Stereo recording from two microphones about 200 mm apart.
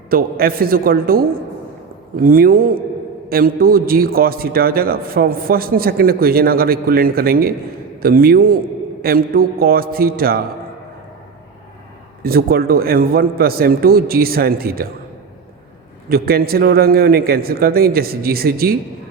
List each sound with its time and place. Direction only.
0.1 s a man's voice: 50° right (ahead or behind)
12.2 s a man's voice: 50° right (ahead or behind)
16.0 s a man's voice: 50° right (ahead or behind)